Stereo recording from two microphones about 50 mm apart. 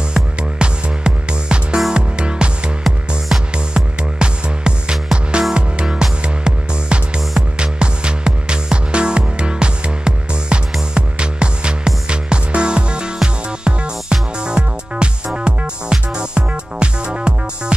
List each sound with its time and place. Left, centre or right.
0.1 s music: centre
3.5 s music: centre